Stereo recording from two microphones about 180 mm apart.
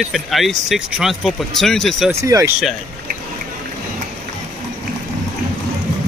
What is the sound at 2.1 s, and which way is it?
Speech, 15° right (ahead or behind).